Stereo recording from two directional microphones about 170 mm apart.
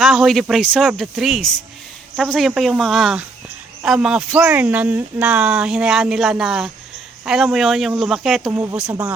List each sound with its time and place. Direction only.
0.0 s speech: centre (ahead or behind)
8.5 s speech: 15° right (ahead or behind)